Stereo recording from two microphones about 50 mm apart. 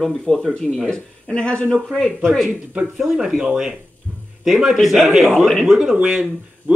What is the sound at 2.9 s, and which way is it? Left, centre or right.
A man's voice, centre.